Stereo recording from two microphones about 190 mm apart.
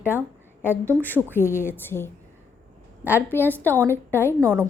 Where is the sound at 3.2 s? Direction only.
10° left (ahead or behind).